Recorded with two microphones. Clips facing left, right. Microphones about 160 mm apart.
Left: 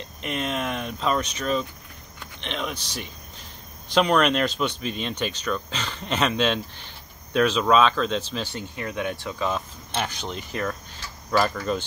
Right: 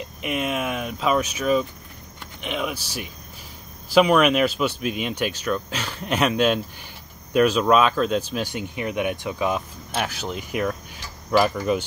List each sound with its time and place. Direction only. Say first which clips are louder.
0.2 s speech: right 2 dB; 5° right (ahead or behind)